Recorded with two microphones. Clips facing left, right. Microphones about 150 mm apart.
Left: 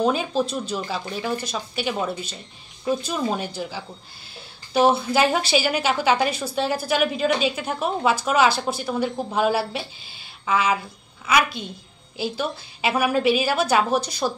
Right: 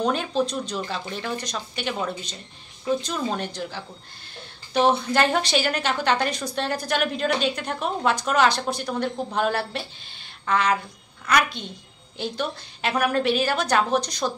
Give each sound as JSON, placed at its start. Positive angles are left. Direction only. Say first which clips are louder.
{"t": 0.0, "sound": "a woman's voice", "louder": "left 2 dB", "side_deg": 5}